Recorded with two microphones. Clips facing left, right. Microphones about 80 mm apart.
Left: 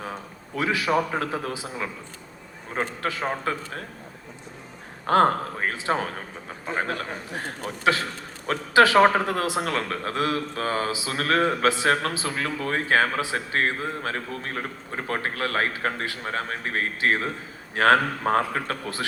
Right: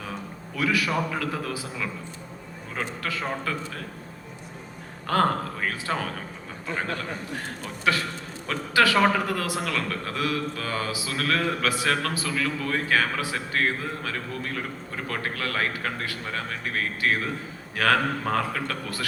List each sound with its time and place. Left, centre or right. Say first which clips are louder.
0.0 s a man's voice: left 1 dB; left
2.7 s a man's voice: left 3 dB; left
5.0 s a man's voice: left 4 dB; left